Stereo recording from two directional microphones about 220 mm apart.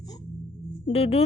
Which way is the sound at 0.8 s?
25° left (ahead or behind).